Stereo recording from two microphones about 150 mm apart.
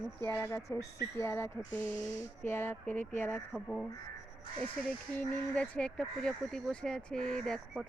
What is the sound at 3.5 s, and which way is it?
Speech, centre (ahead or behind).